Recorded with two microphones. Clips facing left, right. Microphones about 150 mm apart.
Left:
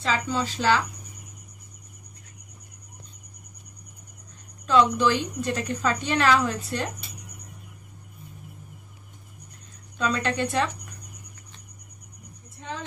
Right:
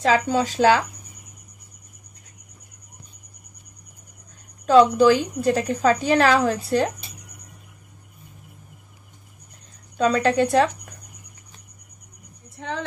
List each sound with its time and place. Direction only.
0.3 s speech: 50° right (ahead or behind)
4.6 s a woman's voice: 40° right (ahead or behind)
9.9 s speech: 45° right (ahead or behind)
12.5 s a sound: 70° right (ahead or behind)